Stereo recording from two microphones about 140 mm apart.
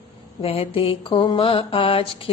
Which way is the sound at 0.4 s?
45° left (ahead or behind).